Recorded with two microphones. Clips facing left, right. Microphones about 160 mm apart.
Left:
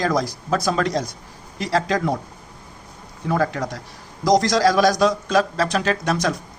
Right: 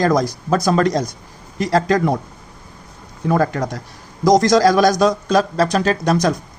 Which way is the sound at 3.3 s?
45° right (ahead or behind).